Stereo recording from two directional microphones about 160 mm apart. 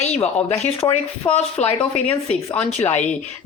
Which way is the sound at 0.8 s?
20° left (ahead or behind).